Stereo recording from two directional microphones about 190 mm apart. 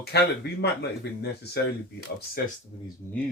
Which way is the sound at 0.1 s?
60° left (ahead or behind).